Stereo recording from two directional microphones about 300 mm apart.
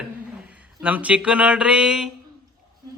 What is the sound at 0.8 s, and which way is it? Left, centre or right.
Speech, centre.